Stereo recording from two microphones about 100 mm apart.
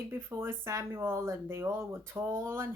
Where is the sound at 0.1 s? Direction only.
25° right (ahead or behind).